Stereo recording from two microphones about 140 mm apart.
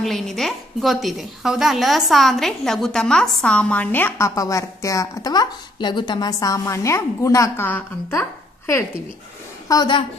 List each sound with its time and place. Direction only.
0.0 s a woman's voice: centre (ahead or behind); by 10.0 s 30° left (ahead or behind)